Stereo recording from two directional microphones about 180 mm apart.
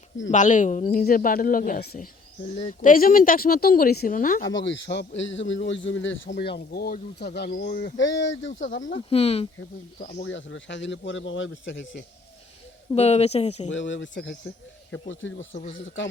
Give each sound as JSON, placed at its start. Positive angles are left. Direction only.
{"t": 0.3, "sound": "speech", "side_deg": 45}
{"t": 2.6, "sound": "speech", "side_deg": 35}
{"t": 2.9, "sound": "speech", "side_deg": 50}
{"t": 4.4, "sound": "a man's voice", "side_deg": 90}
{"t": 6.4, "sound": "speech", "side_deg": 65}
{"t": 7.9, "sound": "a man's voice", "side_deg": 90}
{"t": 9.0, "sound": "speech", "side_deg": 35}
{"t": 10.2, "sound": "a man's voice", "side_deg": 90}
{"t": 12.9, "sound": "speech", "side_deg": 35}
{"t": 13.7, "sound": "a man's voice", "side_deg": 90}